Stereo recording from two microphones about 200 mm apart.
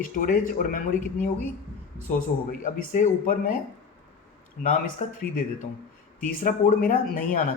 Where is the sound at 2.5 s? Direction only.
40° left (ahead or behind).